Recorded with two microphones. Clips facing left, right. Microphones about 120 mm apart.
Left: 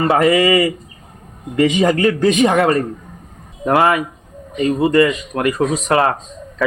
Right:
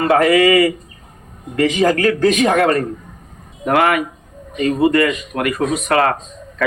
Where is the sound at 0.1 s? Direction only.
30° left (ahead or behind).